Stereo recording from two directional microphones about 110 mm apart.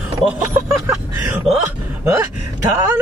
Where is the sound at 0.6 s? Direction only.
20° right (ahead or behind).